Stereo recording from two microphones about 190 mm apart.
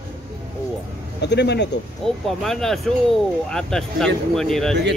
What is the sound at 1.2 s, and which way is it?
Speech, 60° left (ahead or behind).